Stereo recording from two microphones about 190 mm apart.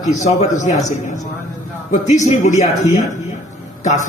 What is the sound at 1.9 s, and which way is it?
A man's voice, 40° left (ahead or behind).